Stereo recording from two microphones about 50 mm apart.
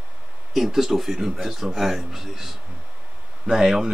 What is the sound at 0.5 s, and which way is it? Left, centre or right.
Speech, centre.